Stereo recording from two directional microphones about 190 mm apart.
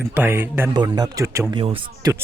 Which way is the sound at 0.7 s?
20° right (ahead or behind).